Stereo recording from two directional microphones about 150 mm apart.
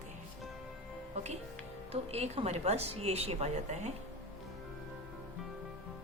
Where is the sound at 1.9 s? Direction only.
45° right (ahead or behind).